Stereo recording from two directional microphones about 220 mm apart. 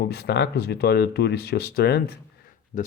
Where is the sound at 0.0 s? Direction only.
45° left (ahead or behind).